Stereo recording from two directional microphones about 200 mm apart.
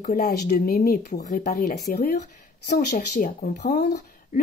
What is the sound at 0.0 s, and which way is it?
Speech, 45° left (ahead or behind).